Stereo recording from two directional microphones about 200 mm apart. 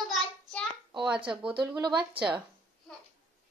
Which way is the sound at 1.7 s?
20° right (ahead or behind).